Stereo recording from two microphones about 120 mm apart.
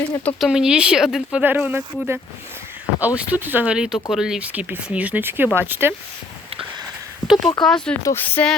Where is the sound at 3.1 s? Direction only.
15° right (ahead or behind).